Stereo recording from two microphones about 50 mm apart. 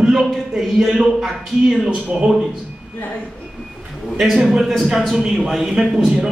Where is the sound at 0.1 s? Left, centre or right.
Centre.